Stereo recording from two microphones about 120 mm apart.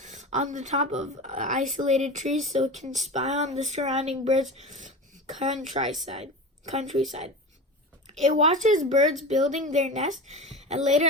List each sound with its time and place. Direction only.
0.0 s speech: 85° right
4.5 s throat clearing: 80° right
5.4 s speech: 70° right (ahead or behind)
6.1 s speech: 55° right (ahead or behind)
6.7 s speech: 65° right (ahead or behind)
8.2 s speech: 70° right (ahead or behind)